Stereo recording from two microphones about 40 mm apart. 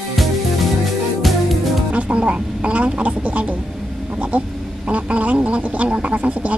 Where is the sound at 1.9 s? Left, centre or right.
Right.